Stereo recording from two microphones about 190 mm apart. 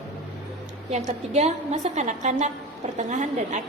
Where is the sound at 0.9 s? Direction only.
35° right (ahead or behind).